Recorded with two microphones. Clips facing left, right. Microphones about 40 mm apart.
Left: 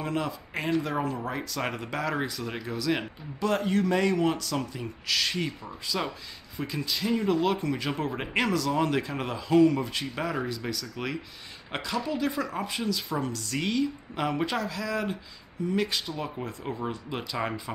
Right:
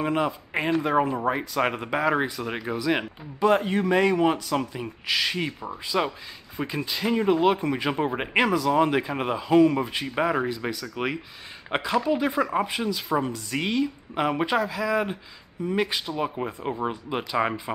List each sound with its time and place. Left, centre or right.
0.0 s speech: right